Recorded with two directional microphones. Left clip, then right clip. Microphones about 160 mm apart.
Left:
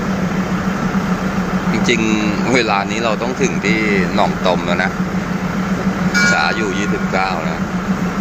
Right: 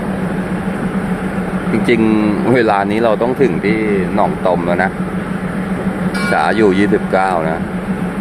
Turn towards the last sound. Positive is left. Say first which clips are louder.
# right 4 dB
turn(degrees=-50)  # may be behind; listen again after turning